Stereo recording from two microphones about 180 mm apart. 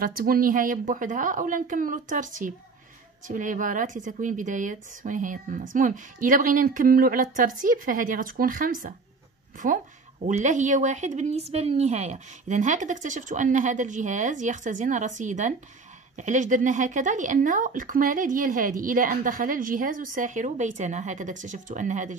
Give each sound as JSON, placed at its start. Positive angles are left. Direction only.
{"t": 0.0, "sound": "speech", "side_deg": -55}